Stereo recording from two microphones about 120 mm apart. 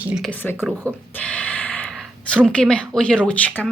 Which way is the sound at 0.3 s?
15° left (ahead or behind).